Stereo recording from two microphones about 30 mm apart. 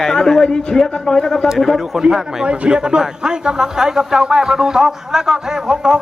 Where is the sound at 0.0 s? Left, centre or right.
Centre.